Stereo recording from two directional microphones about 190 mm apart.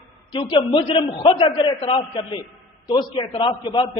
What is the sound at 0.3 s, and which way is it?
A man's voice, 25° left (ahead or behind).